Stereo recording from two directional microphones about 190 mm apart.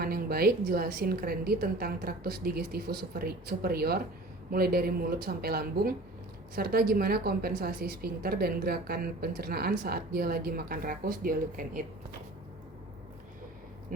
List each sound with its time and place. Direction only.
0.0 s a woman's voice: 55° right (ahead or behind)